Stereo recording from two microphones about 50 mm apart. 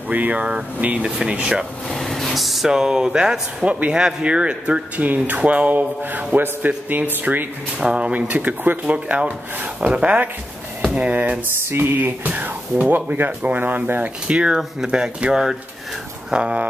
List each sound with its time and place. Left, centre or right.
0.1 s a man's voice: right
1.9 s a man's voice: centre; by 7.4 s right
7.8 s speech: centre
8.1 s a man's voice: right
14.2 s speech: centre